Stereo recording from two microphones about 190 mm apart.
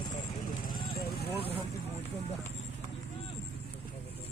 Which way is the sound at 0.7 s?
50° left (ahead or behind).